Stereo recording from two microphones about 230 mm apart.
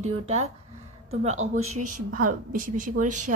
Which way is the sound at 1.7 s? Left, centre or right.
Right.